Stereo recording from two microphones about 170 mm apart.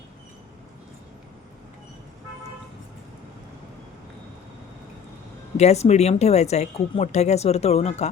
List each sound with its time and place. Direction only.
5.5 s speech: 40° left (ahead or behind)